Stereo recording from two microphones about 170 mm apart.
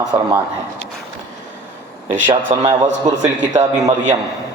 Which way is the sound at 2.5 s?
40° right (ahead or behind).